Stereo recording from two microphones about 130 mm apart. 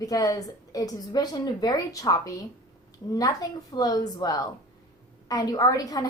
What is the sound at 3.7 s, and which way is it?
A woman's voice, 30° left (ahead or behind).